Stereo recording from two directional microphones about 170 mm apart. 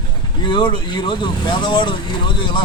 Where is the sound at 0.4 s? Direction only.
30° left (ahead or behind).